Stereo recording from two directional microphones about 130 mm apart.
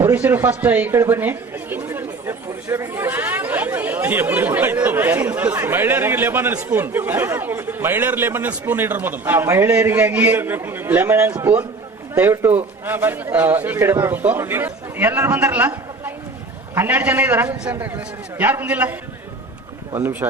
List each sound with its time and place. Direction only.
0.0 s speech: 15° right (ahead or behind)